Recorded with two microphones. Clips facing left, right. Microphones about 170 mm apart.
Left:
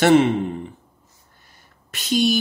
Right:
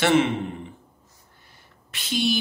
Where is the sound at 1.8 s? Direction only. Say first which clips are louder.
Left 5 dB; 45° left (ahead or behind).